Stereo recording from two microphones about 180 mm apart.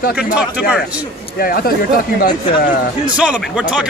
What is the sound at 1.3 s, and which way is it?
Speech, 55° left (ahead or behind).